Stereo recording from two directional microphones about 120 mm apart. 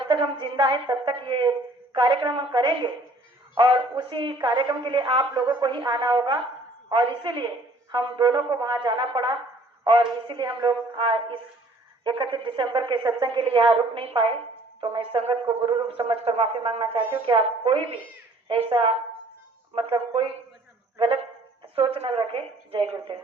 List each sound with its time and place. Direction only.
0.1 s a woman's voice: 45° right (ahead or behind)
17.0 s a woman's voice: 15° right (ahead or behind)
17.2 s a woman's voice: 50° right (ahead or behind)
21.8 s a woman's voice: 55° right (ahead or behind)